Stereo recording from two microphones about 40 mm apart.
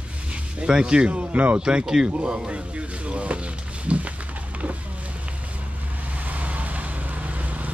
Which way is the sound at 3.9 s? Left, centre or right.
Right.